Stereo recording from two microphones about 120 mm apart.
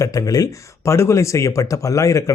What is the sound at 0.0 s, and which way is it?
Speech, 30° left (ahead or behind).